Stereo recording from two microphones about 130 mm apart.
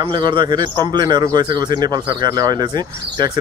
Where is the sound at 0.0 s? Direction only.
35° right (ahead or behind).